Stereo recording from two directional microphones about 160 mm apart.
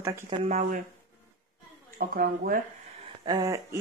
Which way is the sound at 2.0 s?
65° right (ahead or behind).